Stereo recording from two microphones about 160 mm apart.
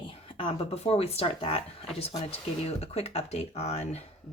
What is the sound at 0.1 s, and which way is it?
Speech, 35° left (ahead or behind).